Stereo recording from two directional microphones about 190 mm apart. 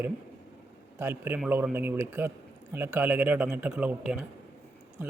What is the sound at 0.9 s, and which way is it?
Speech, 10° right (ahead or behind).